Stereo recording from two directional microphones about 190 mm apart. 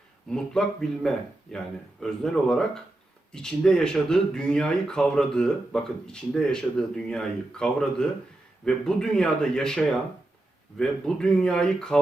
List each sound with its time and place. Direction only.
0.3 s speech: 5° left (ahead or behind)